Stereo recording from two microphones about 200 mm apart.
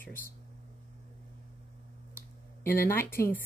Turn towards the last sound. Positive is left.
turn(degrees=10)  # may be behind; listen again after turning